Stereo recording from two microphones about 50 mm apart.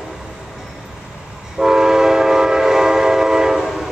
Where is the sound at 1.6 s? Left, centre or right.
Centre.